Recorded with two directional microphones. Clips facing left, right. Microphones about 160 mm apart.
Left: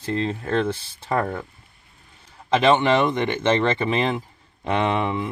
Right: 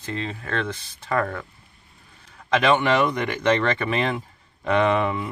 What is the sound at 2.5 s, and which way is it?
Speech, 25° left (ahead or behind).